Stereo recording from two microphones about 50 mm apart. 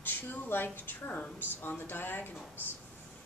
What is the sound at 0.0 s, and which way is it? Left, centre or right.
Speech, left.